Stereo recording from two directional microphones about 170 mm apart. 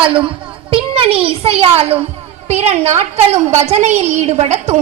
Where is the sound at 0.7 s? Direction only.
30° right (ahead or behind).